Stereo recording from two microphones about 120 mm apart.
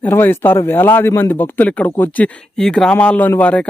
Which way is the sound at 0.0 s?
20° left (ahead or behind).